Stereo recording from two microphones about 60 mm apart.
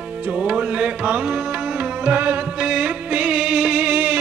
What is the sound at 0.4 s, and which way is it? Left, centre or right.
Music, centre.